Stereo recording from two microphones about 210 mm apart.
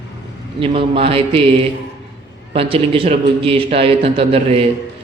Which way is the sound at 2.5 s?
25° right (ahead or behind).